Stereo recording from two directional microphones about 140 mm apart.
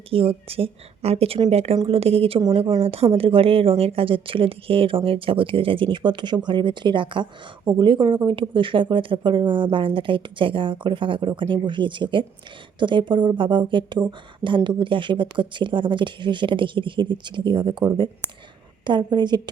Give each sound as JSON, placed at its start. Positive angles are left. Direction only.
{"t": 0.1, "sound": "a woman's voice", "side_deg": -40}